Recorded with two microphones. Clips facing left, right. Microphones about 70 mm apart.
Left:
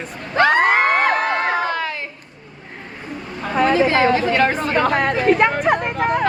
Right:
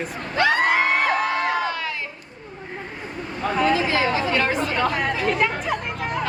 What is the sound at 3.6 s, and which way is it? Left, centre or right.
Chatter, left.